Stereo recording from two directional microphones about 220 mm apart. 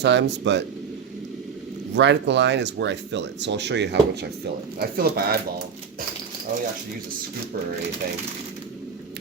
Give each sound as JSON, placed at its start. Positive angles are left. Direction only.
{"t": 0.0, "sound": "speech", "side_deg": -50}
{"t": 2.0, "sound": "speech", "side_deg": -55}